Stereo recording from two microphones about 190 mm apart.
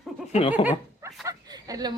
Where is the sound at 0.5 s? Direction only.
10° right (ahead or behind).